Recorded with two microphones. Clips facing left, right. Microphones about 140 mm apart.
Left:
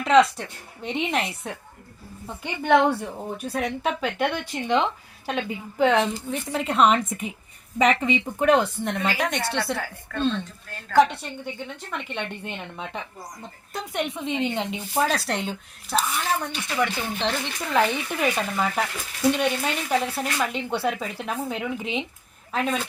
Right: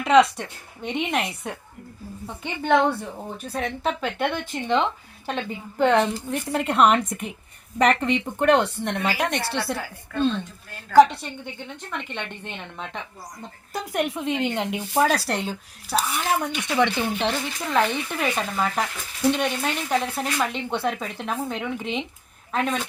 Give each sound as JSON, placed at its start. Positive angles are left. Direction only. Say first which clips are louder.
{"t": 0.0, "sound": "a woman's voice", "louder": "right 1 dB", "side_deg": 0}
{"t": 16.6, "sound": "speech", "louder": "right 4 dB", "side_deg": -20}
{"t": 17.7, "sound": "speech", "louder": "even", "side_deg": 0}